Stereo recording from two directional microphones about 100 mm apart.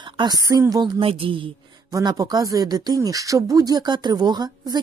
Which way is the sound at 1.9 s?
35° right (ahead or behind).